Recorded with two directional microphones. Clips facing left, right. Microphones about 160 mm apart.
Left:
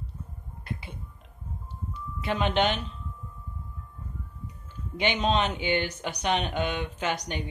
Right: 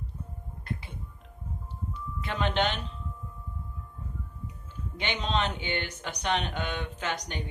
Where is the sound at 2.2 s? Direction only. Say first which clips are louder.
Left 3 dB; 15° left (ahead or behind).